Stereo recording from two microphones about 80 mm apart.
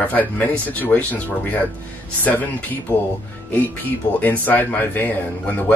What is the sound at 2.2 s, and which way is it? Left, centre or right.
Speech, centre.